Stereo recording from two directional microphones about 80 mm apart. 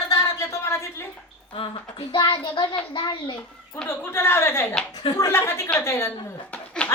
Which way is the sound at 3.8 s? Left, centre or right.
Left.